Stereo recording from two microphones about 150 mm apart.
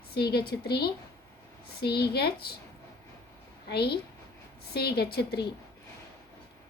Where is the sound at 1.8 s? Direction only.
90° left.